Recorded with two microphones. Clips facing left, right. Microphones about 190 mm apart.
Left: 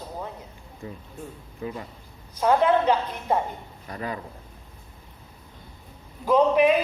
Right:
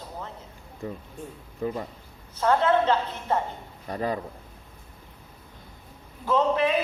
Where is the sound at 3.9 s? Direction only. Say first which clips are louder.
Right 4 dB; 35° right (ahead or behind).